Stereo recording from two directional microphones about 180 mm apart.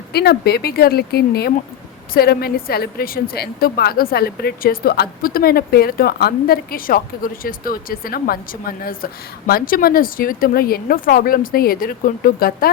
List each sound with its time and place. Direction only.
0.1 s a woman's voice: 65° left (ahead or behind)